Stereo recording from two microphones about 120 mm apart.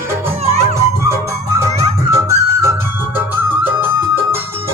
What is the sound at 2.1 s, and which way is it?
Music, 25° right (ahead or behind).